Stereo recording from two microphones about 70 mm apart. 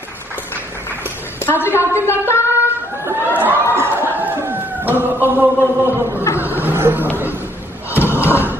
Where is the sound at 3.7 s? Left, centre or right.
Right.